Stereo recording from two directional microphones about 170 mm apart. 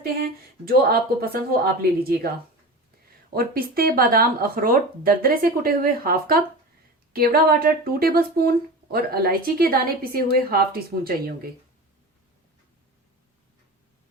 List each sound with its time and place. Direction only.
0.0 s speech: 65° right (ahead or behind)